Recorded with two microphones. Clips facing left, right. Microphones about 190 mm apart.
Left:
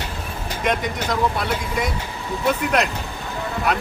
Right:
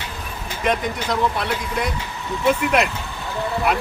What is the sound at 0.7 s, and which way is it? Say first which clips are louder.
A man's voice: right 1 dB; centre (ahead or behind).